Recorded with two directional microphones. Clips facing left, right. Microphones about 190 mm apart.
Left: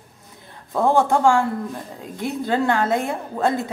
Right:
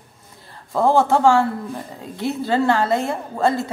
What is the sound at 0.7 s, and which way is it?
Speech, 15° left (ahead or behind).